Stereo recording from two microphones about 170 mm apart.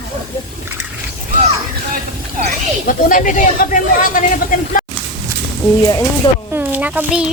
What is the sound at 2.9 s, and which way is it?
Speech, 55° left (ahead or behind).